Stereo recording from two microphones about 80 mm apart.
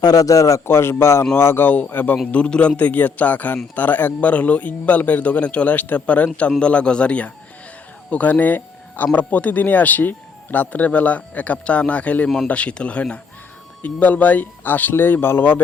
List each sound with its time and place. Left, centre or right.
0.0 s a man's voice: left
0.7 s speech: left